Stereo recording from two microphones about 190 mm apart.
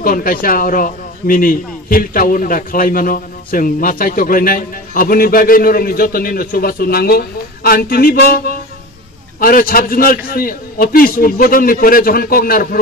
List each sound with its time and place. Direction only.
0.0 s a man's voice: 50° left (ahead or behind)